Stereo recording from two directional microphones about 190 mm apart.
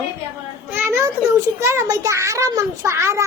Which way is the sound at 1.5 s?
15° right (ahead or behind).